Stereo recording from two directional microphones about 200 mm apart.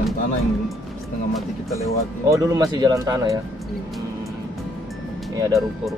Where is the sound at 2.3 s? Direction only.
15° right (ahead or behind).